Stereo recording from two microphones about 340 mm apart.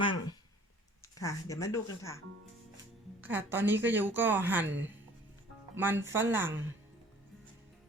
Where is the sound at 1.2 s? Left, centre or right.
Centre.